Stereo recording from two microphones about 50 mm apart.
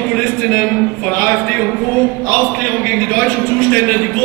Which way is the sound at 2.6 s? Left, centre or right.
Left.